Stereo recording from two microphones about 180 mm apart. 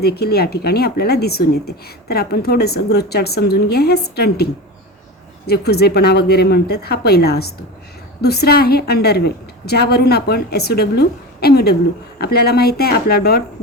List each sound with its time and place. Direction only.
0.0 s a woman's voice: 60° left (ahead or behind)
5.5 s a woman's voice: 60° left (ahead or behind)